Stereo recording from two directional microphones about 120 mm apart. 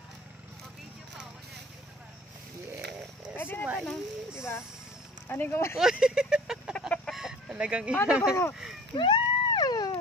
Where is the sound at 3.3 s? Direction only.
15° left (ahead or behind).